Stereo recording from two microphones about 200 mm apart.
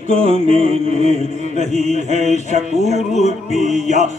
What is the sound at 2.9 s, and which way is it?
Music, 35° left (ahead or behind).